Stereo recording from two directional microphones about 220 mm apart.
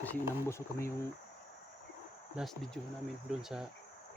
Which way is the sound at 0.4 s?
10° left (ahead or behind).